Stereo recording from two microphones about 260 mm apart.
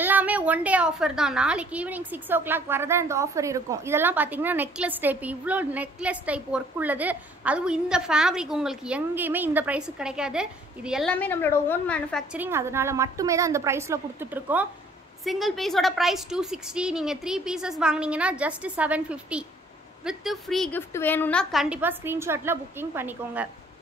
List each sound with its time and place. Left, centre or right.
0.0 s a woman's voice: centre